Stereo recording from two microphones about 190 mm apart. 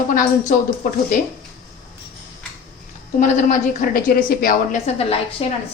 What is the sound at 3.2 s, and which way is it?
A woman's voice, 45° left (ahead or behind).